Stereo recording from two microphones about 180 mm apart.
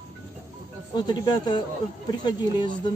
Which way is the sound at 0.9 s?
25° left (ahead or behind).